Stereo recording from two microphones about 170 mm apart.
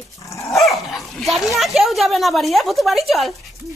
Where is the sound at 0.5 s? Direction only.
Centre (ahead or behind).